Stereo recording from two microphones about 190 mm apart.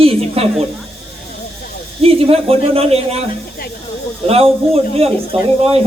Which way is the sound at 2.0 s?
30° right (ahead or behind).